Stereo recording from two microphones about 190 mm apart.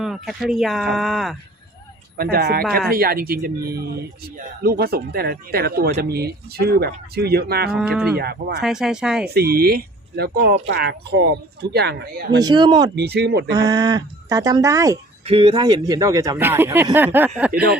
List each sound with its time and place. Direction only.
0.0 s speech: centre (ahead or behind)
2.1 s speech: 55° right (ahead or behind)
7.8 s speech: 5° right (ahead or behind)
8.1 s speech: 55° right (ahead or behind)
8.6 s speech: centre (ahead or behind)
9.2 s speech: 55° right (ahead or behind)
12.4 s speech: 20° right (ahead or behind)
13.0 s speech: 60° right (ahead or behind)
13.6 s speech: 20° right (ahead or behind)
15.3 s speech: 25° right (ahead or behind); by 17.5 s 10° right (ahead or behind)
17.5 s speech: 55° right (ahead or behind)